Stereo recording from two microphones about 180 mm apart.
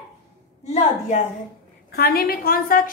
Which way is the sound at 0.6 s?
40° left (ahead or behind).